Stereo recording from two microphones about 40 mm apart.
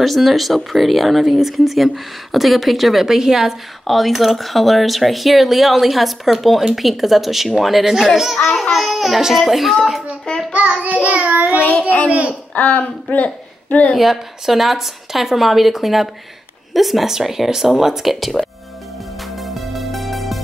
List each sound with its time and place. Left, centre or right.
0.0 s speech: centre
3.8 s speech: centre
8.4 s a child's voice: left
8.7 s speech: centre
10.5 s child singing: right
12.5 s a child's voice: left
13.9 s speech: centre
19.3 s music: centre